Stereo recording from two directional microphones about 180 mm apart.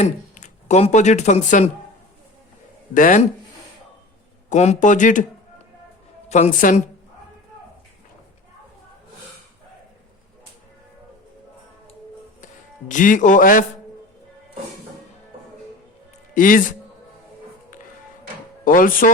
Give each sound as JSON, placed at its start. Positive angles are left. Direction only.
{"t": 0.0, "sound": "speech", "side_deg": 40}
{"t": 2.9, "sound": "speech", "side_deg": 45}
{"t": 4.4, "sound": "speech", "side_deg": 40}
{"t": 6.2, "sound": "a woman's voice", "side_deg": 40}
{"t": 12.9, "sound": "speech", "side_deg": 45}
{"t": 16.3, "sound": "a man's voice", "side_deg": 50}
{"t": 18.6, "sound": "speech", "side_deg": 50}